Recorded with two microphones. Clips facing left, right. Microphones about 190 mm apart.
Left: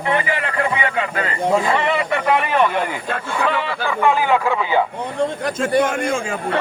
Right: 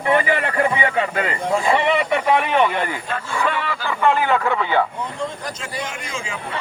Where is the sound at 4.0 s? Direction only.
5° left (ahead or behind).